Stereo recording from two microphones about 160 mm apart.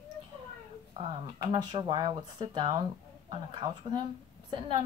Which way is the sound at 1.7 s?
30° right (ahead or behind).